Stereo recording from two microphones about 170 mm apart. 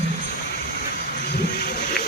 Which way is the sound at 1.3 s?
70° left (ahead or behind).